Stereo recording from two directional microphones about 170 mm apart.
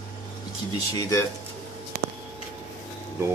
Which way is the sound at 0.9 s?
20° left (ahead or behind).